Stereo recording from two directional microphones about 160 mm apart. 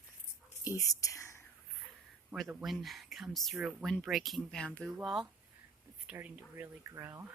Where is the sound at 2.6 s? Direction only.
Centre (ahead or behind).